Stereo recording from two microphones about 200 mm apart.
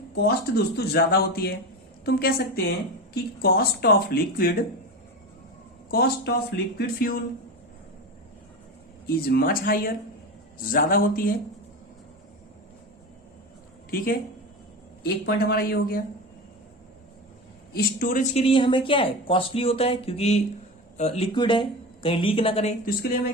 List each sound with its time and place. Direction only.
0.2 s speech: 55° left (ahead or behind)
5.9 s speech: 50° left (ahead or behind)
9.0 s speech: 50° left (ahead or behind)
13.9 s speech: 45° left (ahead or behind)
17.7 s speech: 45° left (ahead or behind); by 22.7 s 30° left (ahead or behind)